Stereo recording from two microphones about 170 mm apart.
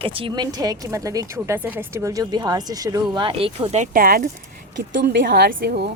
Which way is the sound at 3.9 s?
55° right (ahead or behind).